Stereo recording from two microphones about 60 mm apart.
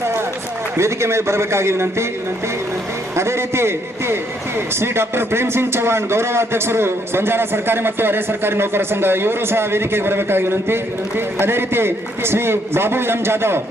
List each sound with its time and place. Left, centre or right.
0.8 s a man's voice: right
3.2 s a man's voice: right